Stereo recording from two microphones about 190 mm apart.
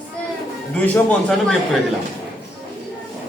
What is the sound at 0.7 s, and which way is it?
Speech, 5° left (ahead or behind).